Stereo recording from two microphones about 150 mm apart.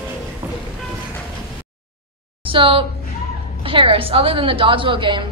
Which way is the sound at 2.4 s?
35° right (ahead or behind).